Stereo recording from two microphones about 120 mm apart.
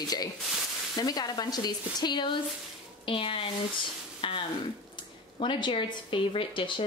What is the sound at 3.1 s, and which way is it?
Speech, 50° left (ahead or behind).